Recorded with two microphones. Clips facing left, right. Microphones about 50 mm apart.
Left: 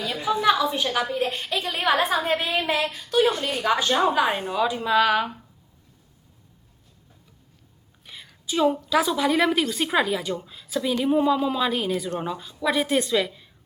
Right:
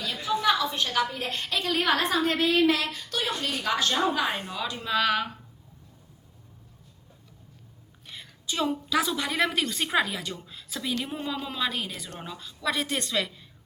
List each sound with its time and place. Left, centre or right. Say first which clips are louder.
0.0 s a sound: left 4 dB; centre
1.1 s a woman's voice: left 5 dB; centre
3.8 s a woman's voice: left 4 dB; left
4.1 s a woman's voice: left 6 dB; centre
8.0 s a sound: even; centre
8.9 s a woman's voice: left 6 dB; centre